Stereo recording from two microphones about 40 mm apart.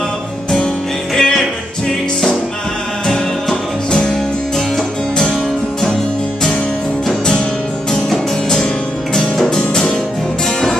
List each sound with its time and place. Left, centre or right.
1.1 s music: centre
9.5 s music: centre